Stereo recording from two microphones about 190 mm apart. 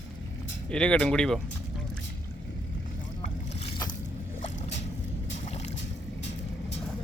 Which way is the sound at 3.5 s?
35° left (ahead or behind).